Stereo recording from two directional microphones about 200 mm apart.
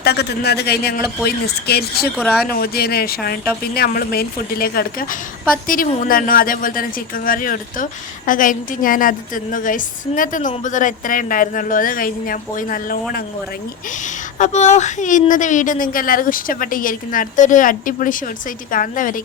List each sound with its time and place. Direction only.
0.0 s a woman's voice: 55° left (ahead or behind)
2.1 s speech: 5° left (ahead or behind)
2.4 s a woman's voice: 50° left (ahead or behind)